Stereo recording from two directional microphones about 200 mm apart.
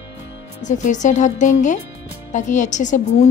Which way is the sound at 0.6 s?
35° left (ahead or behind).